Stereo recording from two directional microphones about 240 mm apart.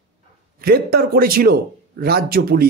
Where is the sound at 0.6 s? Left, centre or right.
Right.